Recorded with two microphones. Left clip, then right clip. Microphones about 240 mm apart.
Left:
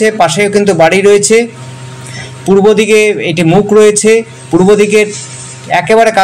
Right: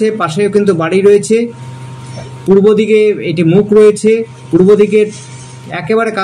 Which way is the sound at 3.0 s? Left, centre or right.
Centre.